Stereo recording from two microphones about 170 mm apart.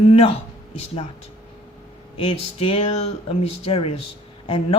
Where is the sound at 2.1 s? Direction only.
35° left (ahead or behind).